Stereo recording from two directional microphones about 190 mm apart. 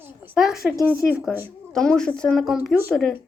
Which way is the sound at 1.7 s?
5° left (ahead or behind).